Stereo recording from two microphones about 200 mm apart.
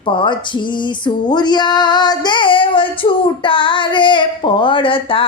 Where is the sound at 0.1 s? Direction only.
25° left (ahead or behind).